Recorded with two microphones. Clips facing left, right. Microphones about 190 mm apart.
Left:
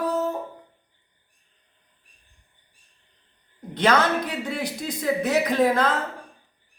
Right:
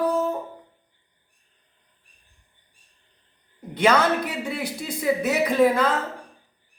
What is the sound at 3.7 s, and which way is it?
Speech, 10° right (ahead or behind).